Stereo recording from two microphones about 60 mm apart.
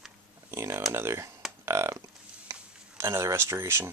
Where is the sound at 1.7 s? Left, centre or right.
Right.